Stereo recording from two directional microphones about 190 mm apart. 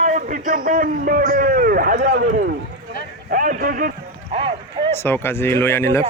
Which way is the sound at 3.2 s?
45° right (ahead or behind).